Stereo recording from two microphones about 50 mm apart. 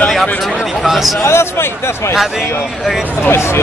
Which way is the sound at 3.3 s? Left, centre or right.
Left.